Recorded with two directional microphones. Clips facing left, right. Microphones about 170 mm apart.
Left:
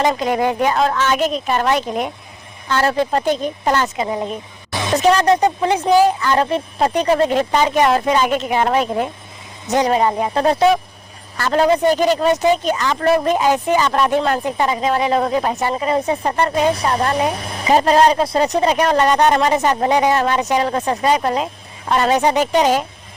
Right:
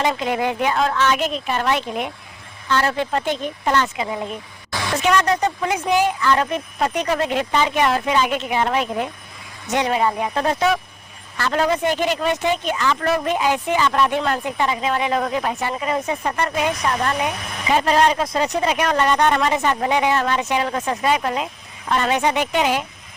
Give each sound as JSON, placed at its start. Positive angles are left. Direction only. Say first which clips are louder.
{"t": 0.0, "sound": "speech", "louder": "left 4 dB", "side_deg": 40}
{"t": 4.7, "sound": "a sound", "louder": "left 5 dB", "side_deg": 20}
{"t": 5.0, "sound": "speech", "louder": "left 5 dB", "side_deg": 35}